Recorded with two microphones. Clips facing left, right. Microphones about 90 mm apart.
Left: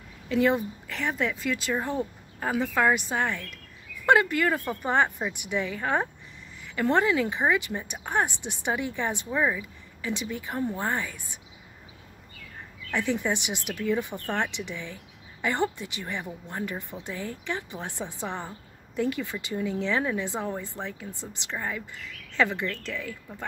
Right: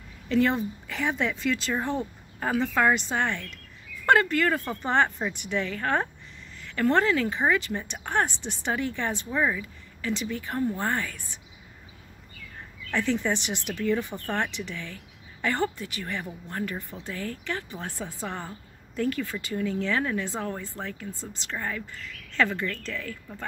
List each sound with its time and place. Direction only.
0.3 s speech: 5° left (ahead or behind)
12.9 s a woman's voice: 15° left (ahead or behind)